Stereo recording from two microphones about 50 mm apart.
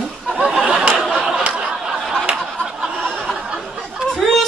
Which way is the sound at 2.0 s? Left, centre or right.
Centre.